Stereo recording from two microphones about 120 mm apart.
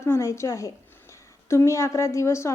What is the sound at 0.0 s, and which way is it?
A woman's voice, 25° left (ahead or behind).